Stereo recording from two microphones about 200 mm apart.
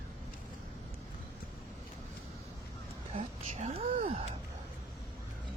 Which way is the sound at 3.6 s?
30° right (ahead or behind).